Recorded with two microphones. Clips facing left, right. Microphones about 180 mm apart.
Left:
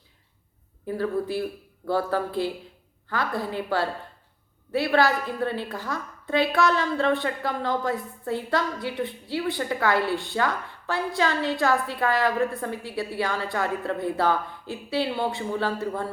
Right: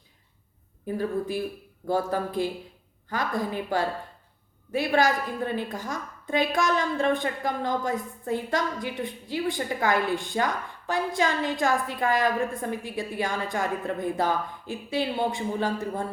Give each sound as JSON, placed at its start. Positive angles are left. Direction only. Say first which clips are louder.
{"t": 0.9, "sound": "a woman's voice", "louder": "left 2 dB", "side_deg": -15}